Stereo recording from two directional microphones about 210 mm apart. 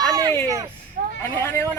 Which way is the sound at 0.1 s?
15° right (ahead or behind).